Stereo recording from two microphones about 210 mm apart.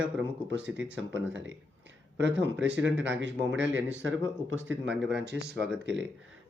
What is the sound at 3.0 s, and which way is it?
Speech, 60° right (ahead or behind).